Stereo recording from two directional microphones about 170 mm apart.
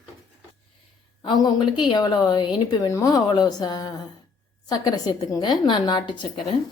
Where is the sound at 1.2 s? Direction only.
25° left (ahead or behind).